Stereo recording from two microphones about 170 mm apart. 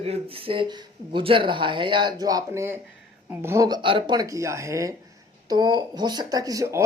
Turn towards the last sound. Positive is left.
turn(degrees=-20)  # may be behind; listen again after turning